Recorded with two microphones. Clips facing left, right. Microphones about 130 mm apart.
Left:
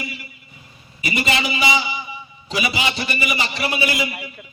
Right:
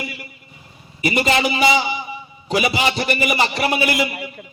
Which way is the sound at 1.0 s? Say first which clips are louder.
Right 5 dB; 45° right (ahead or behind).